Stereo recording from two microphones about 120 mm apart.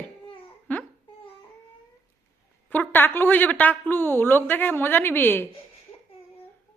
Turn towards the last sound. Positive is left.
turn(degrees=15)  # may be behind; listen again after turning